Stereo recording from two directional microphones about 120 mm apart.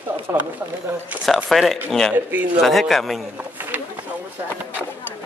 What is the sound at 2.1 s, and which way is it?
Speech, 15° right (ahead or behind).